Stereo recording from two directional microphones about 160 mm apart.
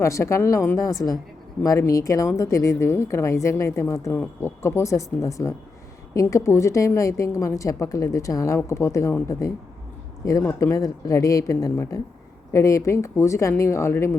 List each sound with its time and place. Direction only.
0.0 s a woman's voice: 20° left (ahead or behind)